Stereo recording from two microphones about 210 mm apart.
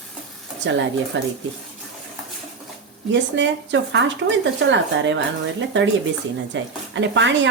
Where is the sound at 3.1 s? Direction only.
60° right (ahead or behind).